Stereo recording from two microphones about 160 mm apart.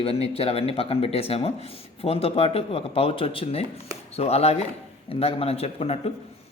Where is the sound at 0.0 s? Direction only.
40° left (ahead or behind).